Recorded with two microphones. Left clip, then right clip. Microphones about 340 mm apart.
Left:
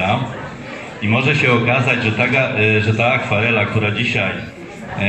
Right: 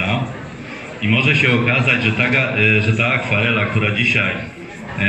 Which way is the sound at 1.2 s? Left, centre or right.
Centre.